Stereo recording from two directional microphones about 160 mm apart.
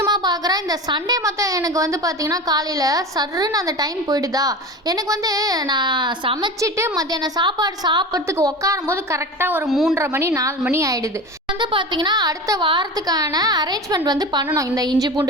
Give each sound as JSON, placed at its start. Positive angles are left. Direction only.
{"t": 0.0, "sound": "a woman's voice", "side_deg": -25}
{"t": 9.6, "sound": "speech", "side_deg": 0}
{"t": 9.9, "sound": "a woman's voice", "side_deg": -15}